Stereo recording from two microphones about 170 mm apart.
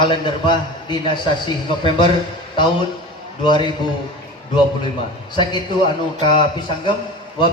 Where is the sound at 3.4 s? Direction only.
25° left (ahead or behind).